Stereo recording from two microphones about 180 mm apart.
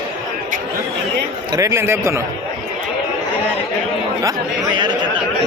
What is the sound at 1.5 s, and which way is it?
Speech, 15° right (ahead or behind).